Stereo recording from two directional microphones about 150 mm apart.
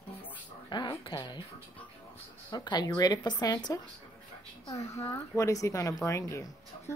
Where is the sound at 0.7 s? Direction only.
30° left (ahead or behind).